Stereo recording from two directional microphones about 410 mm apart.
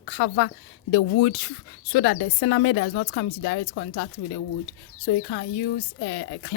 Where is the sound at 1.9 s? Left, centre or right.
Left.